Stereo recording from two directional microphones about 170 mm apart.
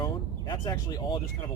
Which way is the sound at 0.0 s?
25° left (ahead or behind).